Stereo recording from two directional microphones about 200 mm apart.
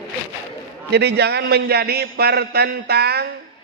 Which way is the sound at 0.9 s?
55° right (ahead or behind).